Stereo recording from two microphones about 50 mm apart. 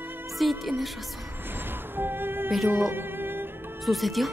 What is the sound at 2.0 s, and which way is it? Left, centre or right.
Music, right.